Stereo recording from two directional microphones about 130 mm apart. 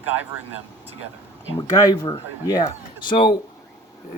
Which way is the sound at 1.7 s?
30° left (ahead or behind).